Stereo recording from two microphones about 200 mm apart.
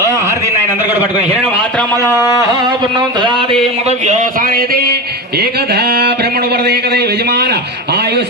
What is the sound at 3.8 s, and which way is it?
A man's voice, 35° right (ahead or behind).